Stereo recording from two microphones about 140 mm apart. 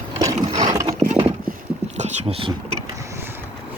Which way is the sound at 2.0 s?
50° right (ahead or behind).